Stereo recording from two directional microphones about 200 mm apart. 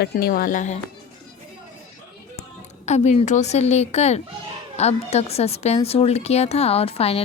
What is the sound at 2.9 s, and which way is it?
A woman's voice, 35° left (ahead or behind).